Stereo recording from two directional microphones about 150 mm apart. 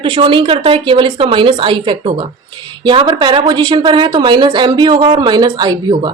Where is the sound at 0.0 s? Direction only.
35° right (ahead or behind).